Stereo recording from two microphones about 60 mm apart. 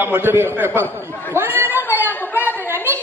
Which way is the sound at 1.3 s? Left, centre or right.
Right.